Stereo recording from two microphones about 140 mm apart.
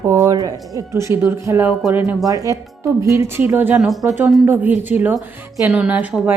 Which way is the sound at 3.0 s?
20° right (ahead or behind).